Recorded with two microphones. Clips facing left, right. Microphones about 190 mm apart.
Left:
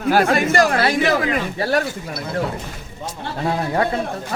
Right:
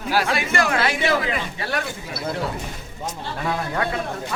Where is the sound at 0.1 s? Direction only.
45° left (ahead or behind).